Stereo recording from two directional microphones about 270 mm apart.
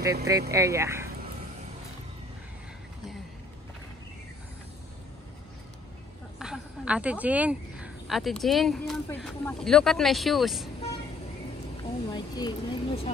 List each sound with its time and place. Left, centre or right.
0.0 s speech: centre
6.4 s a woman's voice: centre
12.1 s speech: centre